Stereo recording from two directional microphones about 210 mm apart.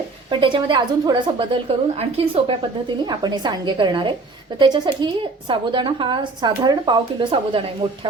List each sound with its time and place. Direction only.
0.3 s a woman's voice: 25° right (ahead or behind)